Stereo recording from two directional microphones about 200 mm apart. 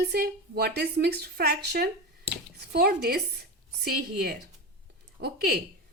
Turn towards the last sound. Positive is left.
turn(degrees=-50)  # may be behind; listen again after turning